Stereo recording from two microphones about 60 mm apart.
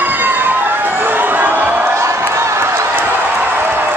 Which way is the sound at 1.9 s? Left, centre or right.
Right.